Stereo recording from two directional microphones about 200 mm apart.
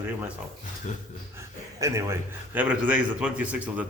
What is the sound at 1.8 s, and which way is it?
A man's voice, 15° right (ahead or behind).